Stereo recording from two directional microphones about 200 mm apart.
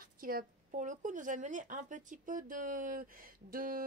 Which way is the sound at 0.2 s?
45° right (ahead or behind).